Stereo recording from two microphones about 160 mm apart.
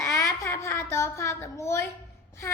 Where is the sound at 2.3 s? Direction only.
20° left (ahead or behind).